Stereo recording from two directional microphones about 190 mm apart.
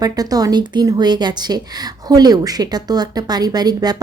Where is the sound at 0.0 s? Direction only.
20° right (ahead or behind).